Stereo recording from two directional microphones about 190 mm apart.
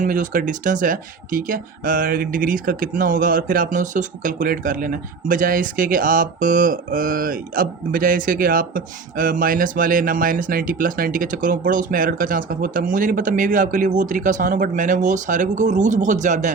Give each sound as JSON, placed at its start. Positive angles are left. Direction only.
{"t": 0.0, "sound": "speech", "side_deg": -45}